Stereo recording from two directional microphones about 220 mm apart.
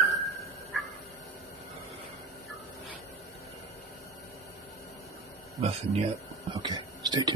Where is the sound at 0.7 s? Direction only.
Centre (ahead or behind).